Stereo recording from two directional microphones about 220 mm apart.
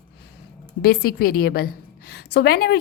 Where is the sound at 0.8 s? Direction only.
45° left (ahead or behind).